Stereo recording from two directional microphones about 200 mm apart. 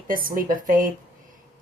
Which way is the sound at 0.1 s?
45° right (ahead or behind).